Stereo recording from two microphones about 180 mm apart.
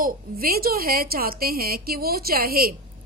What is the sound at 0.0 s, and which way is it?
A woman's voice, 55° right (ahead or behind).